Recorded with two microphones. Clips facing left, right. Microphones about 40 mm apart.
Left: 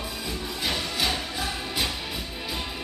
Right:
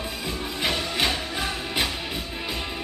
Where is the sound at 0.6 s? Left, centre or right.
Right.